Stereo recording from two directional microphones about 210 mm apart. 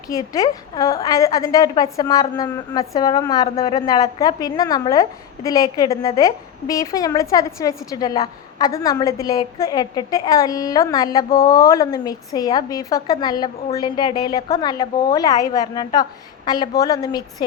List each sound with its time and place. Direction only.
0.1 s a woman's voice: 15° left (ahead or behind)
11.3 s speech: 45° left (ahead or behind)
11.7 s a woman's voice: 15° left (ahead or behind)